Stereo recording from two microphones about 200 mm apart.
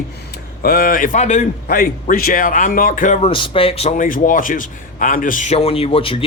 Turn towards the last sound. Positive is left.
turn(degrees=25)  # may be behind; listen again after turning